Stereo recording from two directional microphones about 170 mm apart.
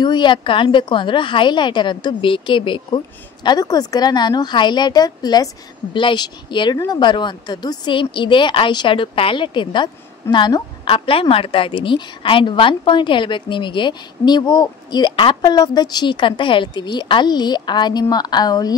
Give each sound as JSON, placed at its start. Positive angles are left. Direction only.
{"t": 0.0, "sound": "a woman's voice", "side_deg": 25}